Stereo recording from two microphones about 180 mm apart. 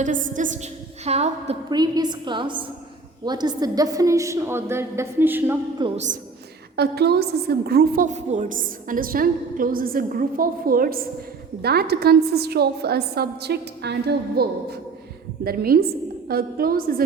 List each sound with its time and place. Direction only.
0.0 s a woman's voice: 45° right (ahead or behind)
1.7 s a woman's voice: 25° right (ahead or behind)
5.8 s a woman's voice: 25° right (ahead or behind)
6.7 s a woman's voice: 65° right (ahead or behind)